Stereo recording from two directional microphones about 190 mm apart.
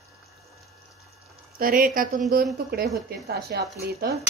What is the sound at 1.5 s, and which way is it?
A woman's voice, 50° right (ahead or behind).